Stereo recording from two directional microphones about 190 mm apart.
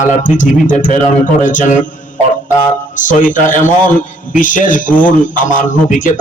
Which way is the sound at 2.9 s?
45° left (ahead or behind).